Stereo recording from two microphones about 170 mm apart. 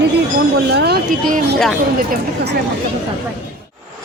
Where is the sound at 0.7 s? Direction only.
75° right (ahead or behind).